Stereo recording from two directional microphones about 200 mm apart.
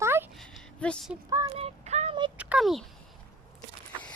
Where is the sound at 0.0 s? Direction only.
10° right (ahead or behind).